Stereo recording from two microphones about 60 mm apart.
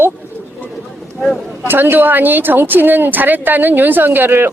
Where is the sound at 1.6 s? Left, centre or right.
Right.